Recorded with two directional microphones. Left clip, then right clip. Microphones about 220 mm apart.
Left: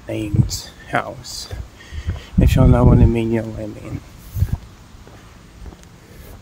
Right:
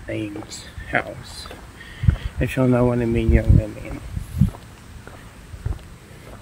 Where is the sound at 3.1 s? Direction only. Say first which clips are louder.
Left 1 dB; 25° left (ahead or behind).